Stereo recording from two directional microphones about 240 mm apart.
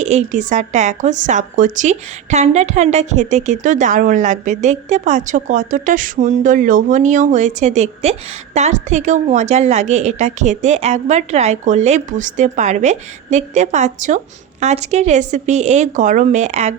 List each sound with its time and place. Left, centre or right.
0.0 s a woman's voice: right